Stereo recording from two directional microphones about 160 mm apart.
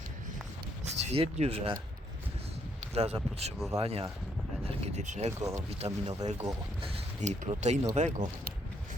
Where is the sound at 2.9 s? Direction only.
40° right (ahead or behind).